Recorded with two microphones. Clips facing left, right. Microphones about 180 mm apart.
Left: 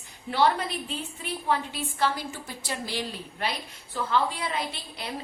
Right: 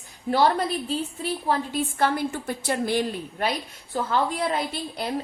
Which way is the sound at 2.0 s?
55° right (ahead or behind).